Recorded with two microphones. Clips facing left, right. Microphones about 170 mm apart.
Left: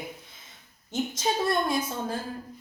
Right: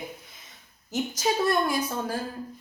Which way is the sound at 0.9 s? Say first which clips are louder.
Right 1 dB; 25° left (ahead or behind).